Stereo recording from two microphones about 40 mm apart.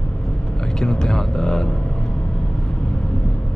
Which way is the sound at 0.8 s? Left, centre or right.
Centre.